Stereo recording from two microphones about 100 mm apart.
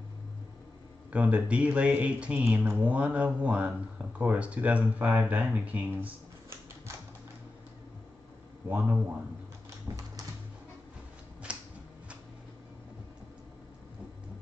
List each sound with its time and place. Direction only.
1.1 s speech: 10° right (ahead or behind)
8.6 s speech: 15° right (ahead or behind)
9.9 s typing: 35° right (ahead or behind)
11.5 s a sound: 10° right (ahead or behind)